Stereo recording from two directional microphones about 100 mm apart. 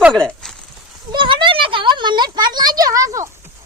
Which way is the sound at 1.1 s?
55° right (ahead or behind).